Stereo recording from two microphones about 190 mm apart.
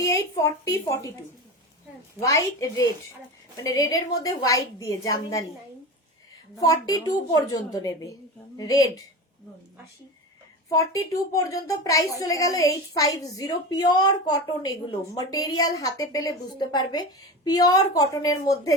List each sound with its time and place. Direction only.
0.0 s a woman's voice: 15° left (ahead or behind)
2.2 s a woman's voice: 15° left (ahead or behind)
6.6 s a woman's voice: 20° left (ahead or behind)
10.7 s a woman's voice: 15° left (ahead or behind)